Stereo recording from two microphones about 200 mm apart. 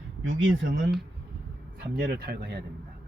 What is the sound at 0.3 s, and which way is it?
Speech, 70° right (ahead or behind).